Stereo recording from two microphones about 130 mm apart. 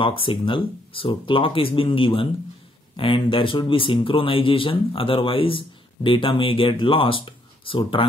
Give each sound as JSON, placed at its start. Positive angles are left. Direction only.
{"t": 0.0, "sound": "speech", "side_deg": 45}